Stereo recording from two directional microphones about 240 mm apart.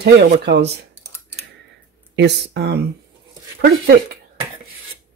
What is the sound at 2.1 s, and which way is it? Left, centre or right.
Speech, right.